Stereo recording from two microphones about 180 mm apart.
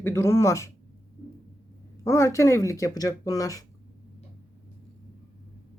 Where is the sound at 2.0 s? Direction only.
15° left (ahead or behind).